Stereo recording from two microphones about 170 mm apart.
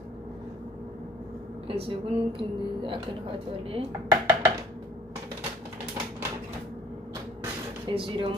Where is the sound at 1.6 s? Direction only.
35° right (ahead or behind).